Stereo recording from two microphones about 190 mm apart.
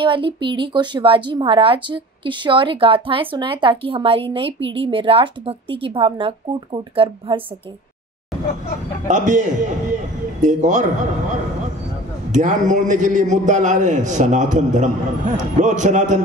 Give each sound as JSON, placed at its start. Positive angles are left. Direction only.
{"t": 0.0, "sound": "a woman's voice", "side_deg": -25}
{"t": 9.0, "sound": "a man's voice", "side_deg": -40}
{"t": 12.3, "sound": "a man's voice", "side_deg": -40}